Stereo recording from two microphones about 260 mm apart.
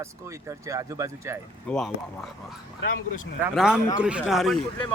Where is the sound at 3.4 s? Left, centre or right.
Centre.